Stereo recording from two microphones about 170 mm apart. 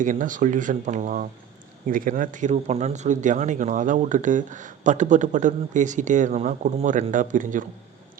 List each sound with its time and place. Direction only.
0.0 s speech: 50° right (ahead or behind)